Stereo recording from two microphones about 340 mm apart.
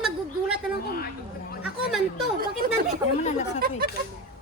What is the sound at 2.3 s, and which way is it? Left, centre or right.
Speech, right.